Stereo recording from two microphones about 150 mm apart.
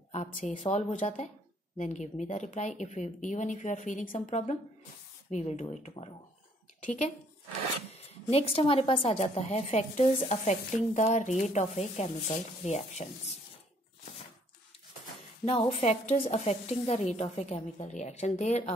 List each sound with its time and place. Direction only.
0.1 s a woman's voice: 55° left (ahead or behind)
15.8 s a woman's voice: 45° left (ahead or behind)